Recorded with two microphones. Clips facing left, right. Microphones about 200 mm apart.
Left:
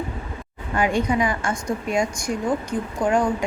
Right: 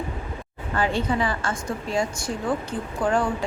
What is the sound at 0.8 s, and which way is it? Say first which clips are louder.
A woman's voice: left 3 dB; 15° left (ahead or behind).